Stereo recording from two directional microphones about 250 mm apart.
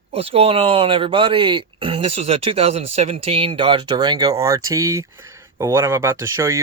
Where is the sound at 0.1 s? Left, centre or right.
Right.